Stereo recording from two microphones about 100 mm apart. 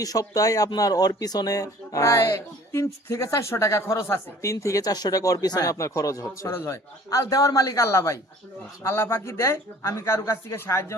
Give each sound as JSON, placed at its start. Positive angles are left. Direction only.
{"t": 0.0, "sound": "speech", "side_deg": 35}